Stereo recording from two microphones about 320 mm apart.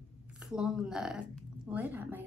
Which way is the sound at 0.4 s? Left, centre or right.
Centre.